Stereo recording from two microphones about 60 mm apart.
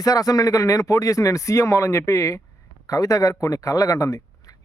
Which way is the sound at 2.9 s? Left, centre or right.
Left.